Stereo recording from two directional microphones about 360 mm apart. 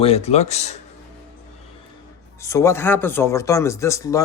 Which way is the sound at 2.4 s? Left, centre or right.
Centre.